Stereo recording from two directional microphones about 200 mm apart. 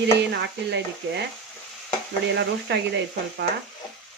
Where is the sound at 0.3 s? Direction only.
60° right (ahead or behind).